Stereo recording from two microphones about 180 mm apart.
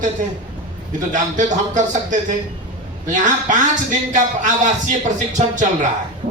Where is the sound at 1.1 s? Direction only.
45° right (ahead or behind).